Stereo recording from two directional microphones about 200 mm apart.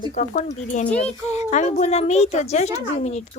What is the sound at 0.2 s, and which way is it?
A child's voice, 35° left (ahead or behind).